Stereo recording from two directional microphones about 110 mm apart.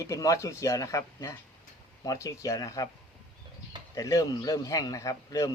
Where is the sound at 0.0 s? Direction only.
30° left (ahead or behind).